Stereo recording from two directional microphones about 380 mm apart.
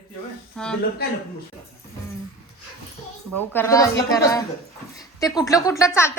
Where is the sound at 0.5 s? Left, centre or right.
Centre.